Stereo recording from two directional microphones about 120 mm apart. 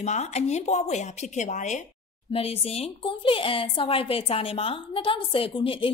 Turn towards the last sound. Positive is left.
turn(degrees=45)  # may be behind; listen again after turning